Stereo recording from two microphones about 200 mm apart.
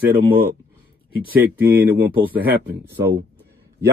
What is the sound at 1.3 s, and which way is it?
Speech, 10° right (ahead or behind).